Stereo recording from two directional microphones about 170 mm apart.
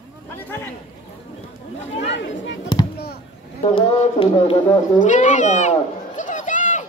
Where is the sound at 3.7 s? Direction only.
35° left (ahead or behind).